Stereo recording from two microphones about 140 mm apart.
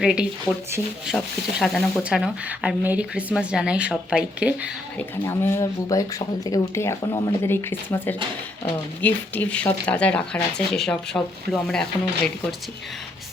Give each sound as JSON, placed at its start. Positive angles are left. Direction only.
{"t": 0.0, "sound": "speech", "side_deg": -5}
{"t": 4.9, "sound": "speech", "side_deg": 20}